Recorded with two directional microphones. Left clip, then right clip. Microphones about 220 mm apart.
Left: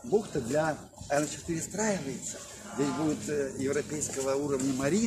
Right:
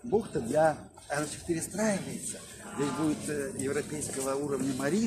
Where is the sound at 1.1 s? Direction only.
25° left (ahead or behind).